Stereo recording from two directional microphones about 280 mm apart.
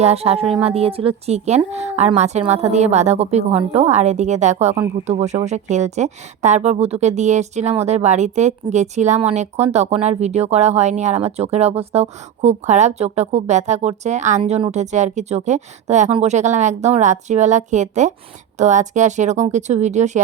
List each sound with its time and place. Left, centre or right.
0.0 s speech: right